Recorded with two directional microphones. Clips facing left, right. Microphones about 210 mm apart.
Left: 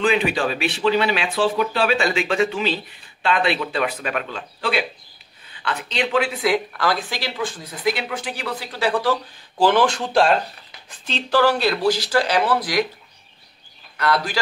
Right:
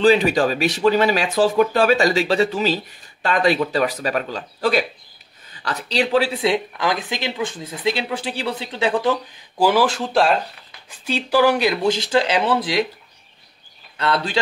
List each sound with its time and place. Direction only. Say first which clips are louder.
0.0 s speech: right 5 dB; 40° right (ahead or behind); by 9.1 s 20° right (ahead or behind)
9.6 s speech: even; 5° right (ahead or behind); by 12.8 s 25° right (ahead or behind)
13.9 s speech: right 1 dB; 25° right (ahead or behind)